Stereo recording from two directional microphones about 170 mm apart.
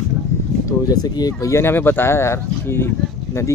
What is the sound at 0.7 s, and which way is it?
Speech, 20° left (ahead or behind).